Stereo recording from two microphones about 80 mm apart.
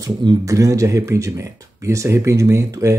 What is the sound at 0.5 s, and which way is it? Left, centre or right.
Speech, right.